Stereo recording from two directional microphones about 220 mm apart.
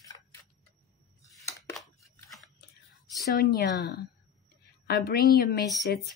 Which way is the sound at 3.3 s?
45° left (ahead or behind).